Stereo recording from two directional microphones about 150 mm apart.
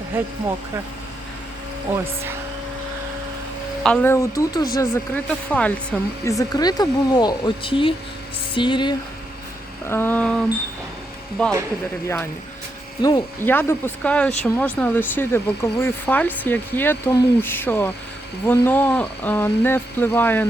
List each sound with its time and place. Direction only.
3.8 s speech: 5° left (ahead or behind)
4.1 s speech: 20° left (ahead or behind)
5.1 s speech: 10° left (ahead or behind)
6.2 s speech: 25° left (ahead or behind)
9.8 s speech: 15° left (ahead or behind)
13.0 s speech: 25° left (ahead or behind)
13.4 s speech: 15° left (ahead or behind)